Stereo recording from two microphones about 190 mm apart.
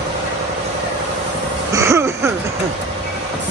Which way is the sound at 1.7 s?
15° right (ahead or behind).